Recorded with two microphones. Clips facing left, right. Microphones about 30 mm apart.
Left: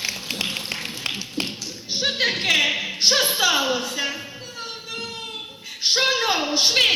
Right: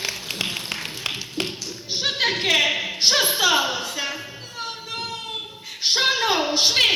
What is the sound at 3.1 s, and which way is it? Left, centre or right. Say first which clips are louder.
Speech: even; centre.